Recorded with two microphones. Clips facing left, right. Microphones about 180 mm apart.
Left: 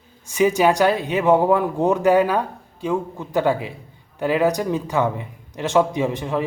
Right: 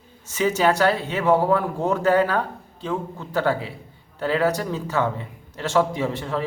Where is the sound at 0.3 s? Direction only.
15° left (ahead or behind).